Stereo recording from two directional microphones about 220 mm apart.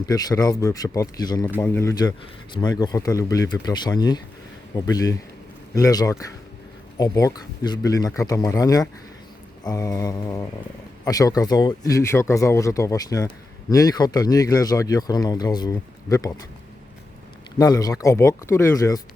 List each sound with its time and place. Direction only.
0.0 s speech: 15° left (ahead or behind)
17.6 s speech: 15° left (ahead or behind)